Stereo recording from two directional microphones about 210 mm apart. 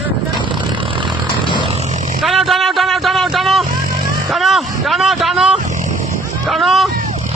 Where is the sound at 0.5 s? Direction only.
20° right (ahead or behind).